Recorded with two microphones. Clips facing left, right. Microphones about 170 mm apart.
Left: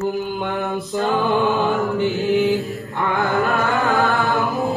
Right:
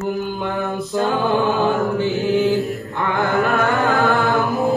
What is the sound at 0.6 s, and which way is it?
A capella, 20° left (ahead or behind).